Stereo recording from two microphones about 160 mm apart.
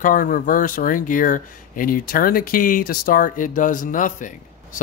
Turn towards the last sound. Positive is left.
turn(degrees=55)  # may be behind; listen again after turning